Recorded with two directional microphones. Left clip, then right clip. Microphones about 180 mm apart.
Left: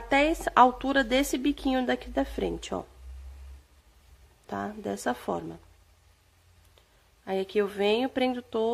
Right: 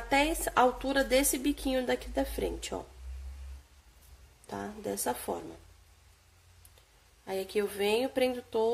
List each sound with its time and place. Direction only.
0.1 s a woman's voice: 35° left (ahead or behind)
4.5 s a woman's voice: 35° left (ahead or behind)
7.2 s a woman's voice: 30° left (ahead or behind)